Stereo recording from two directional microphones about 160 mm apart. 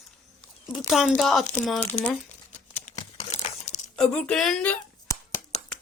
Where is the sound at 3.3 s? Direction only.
45° left (ahead or behind).